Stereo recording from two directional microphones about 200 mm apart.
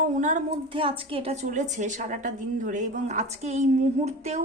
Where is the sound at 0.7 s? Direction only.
25° right (ahead or behind).